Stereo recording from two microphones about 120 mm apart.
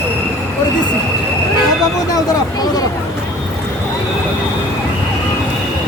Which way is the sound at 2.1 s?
30° left (ahead or behind).